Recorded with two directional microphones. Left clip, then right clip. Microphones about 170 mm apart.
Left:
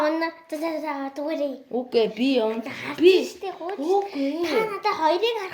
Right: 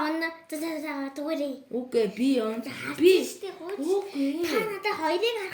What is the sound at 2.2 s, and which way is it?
Speech, 25° right (ahead or behind).